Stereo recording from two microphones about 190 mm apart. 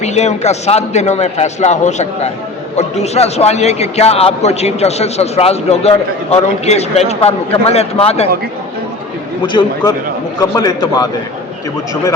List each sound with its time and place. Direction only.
0.0 s a man's voice: 35° left (ahead or behind)
9.4 s a man's voice: 25° left (ahead or behind)